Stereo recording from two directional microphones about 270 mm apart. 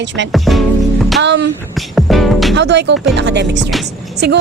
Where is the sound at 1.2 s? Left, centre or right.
Right.